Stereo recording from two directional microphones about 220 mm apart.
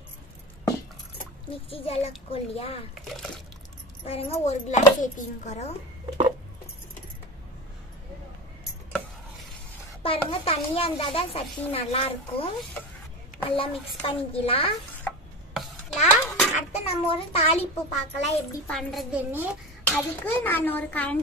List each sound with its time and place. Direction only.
1.5 s a child's voice: 25° left (ahead or behind)
2.9 s a woman's voice: centre (ahead or behind)
4.0 s a child's voice: 25° left (ahead or behind)
10.0 s a child's voice: 25° left (ahead or behind)
15.0 s a sound: centre (ahead or behind)
16.7 s a child's voice: 30° left (ahead or behind)
18.7 s a woman's voice: centre (ahead or behind)
19.8 s a child's voice: 5° left (ahead or behind)